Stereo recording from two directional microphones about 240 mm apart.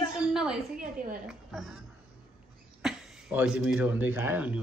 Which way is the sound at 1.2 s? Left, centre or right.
Centre.